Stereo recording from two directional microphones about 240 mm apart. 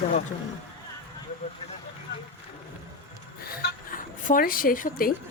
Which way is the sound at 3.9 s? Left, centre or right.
Left.